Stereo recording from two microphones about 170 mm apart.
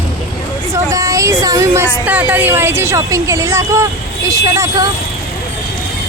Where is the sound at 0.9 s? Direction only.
20° right (ahead or behind).